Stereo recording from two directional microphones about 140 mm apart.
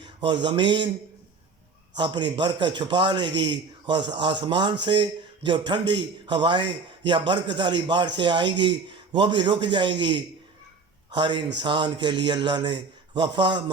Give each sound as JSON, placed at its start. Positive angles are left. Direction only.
{"t": 0.2, "sound": "a man's voice", "side_deg": -35}
{"t": 2.0, "sound": "a man's voice", "side_deg": -35}